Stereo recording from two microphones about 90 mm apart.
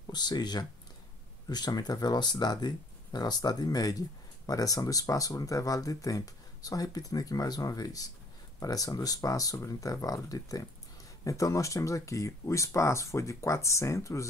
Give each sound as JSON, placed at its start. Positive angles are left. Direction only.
{"t": 0.0, "sound": "speech", "side_deg": 50}